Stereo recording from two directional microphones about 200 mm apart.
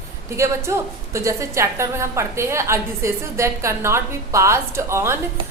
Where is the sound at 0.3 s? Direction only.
15° right (ahead or behind).